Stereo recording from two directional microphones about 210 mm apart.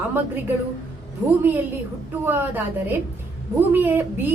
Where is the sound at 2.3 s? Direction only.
10° right (ahead or behind).